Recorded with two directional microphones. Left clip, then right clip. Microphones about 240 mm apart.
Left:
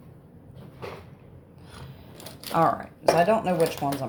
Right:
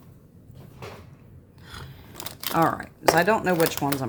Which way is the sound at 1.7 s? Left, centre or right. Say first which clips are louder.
Right 4 dB; right.